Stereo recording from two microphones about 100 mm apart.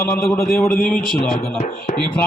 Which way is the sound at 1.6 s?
80° left.